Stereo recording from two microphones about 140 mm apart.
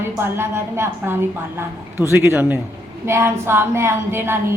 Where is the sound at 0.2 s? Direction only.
15° right (ahead or behind).